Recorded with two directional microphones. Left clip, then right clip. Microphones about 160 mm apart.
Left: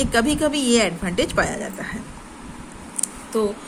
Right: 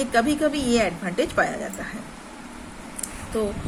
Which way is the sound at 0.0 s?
55° left (ahead or behind).